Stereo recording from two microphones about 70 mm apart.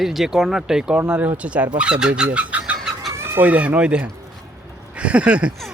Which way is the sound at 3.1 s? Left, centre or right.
Right.